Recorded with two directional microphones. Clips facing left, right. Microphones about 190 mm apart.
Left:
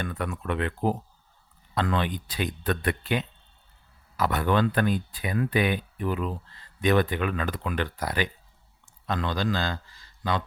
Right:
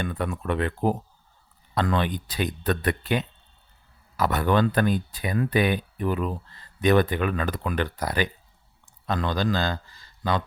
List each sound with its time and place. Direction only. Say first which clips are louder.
0.0 s a man's voice: right 3 dB; 30° right (ahead or behind)